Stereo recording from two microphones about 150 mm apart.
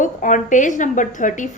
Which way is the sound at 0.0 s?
60° left (ahead or behind).